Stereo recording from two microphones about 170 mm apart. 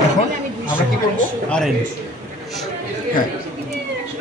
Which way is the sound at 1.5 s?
5° left (ahead or behind).